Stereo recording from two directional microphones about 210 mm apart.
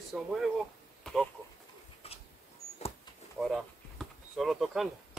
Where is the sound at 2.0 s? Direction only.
30° left (ahead or behind).